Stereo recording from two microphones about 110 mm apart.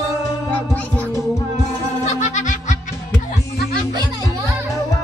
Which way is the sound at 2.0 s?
90° left.